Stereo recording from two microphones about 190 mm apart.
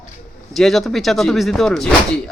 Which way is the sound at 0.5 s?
Centre (ahead or behind).